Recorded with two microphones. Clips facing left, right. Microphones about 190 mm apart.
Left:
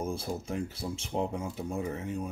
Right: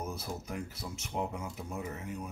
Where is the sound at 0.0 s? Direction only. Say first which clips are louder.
Left 5 dB; 30° left (ahead or behind).